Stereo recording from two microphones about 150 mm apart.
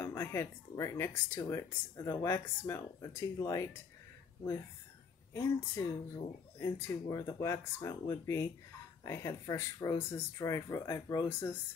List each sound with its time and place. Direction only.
0.0 s speech: 15° left (ahead or behind)
5.3 s speech: 20° left (ahead or behind)